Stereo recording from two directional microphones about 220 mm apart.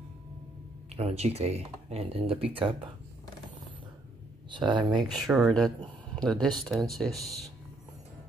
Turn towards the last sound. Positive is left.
turn(degrees=0)  # may be behind; listen again after turning